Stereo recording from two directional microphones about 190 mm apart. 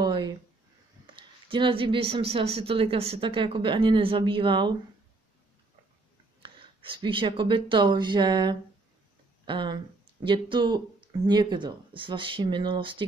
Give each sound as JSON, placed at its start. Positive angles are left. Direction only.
{"t": 0.0, "sound": "a sound", "side_deg": -20}
{"t": 1.0, "sound": "speech", "side_deg": -25}
{"t": 6.4, "sound": "speech", "side_deg": -25}